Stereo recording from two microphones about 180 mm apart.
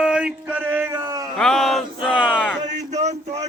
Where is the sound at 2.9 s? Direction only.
40° right (ahead or behind).